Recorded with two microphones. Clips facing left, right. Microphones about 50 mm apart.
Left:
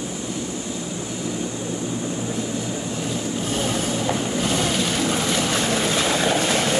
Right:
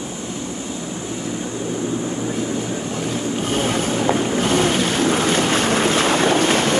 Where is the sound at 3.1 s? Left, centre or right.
Right.